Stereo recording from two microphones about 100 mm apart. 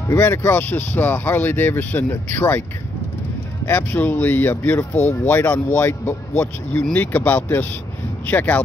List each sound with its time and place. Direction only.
0.1 s speech: 25° left (ahead or behind)
3.6 s speech: 20° left (ahead or behind)